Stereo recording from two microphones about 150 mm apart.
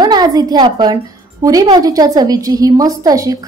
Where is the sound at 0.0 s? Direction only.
25° right (ahead or behind).